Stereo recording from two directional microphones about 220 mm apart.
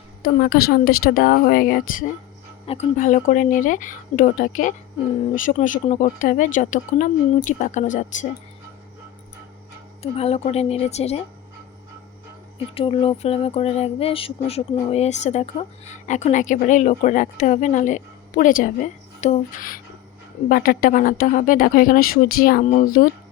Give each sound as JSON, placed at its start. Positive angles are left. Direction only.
{"t": 0.2, "sound": "speech", "side_deg": 45}
{"t": 10.0, "sound": "speech", "side_deg": 25}
{"t": 12.7, "sound": "speech", "side_deg": 25}